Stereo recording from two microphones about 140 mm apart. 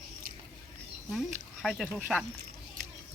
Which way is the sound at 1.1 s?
Centre (ahead or behind).